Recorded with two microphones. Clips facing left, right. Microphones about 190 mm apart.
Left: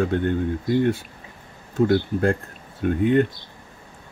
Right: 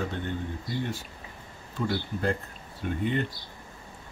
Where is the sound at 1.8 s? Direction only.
55° left (ahead or behind).